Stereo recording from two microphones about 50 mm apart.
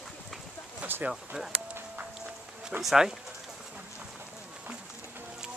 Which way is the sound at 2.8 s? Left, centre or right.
Centre.